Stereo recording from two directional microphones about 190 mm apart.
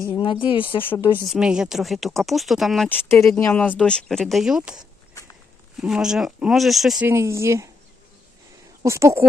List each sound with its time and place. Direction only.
0.0 s speech: 25° left (ahead or behind)
0.8 s speech: 10° left (ahead or behind)
1.0 s speech: 25° left (ahead or behind)
1.3 s speech: 5° right (ahead or behind)
5.8 s speech: 5° right (ahead or behind)
7.1 s speech: 15° right (ahead or behind)
8.8 s speech: 15° right (ahead or behind)